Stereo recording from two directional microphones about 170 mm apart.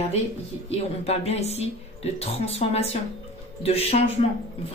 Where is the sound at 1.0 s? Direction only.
40° left (ahead or behind).